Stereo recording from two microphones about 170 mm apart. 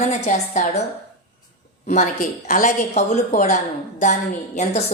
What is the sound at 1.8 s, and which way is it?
A woman's voice, 45° left (ahead or behind).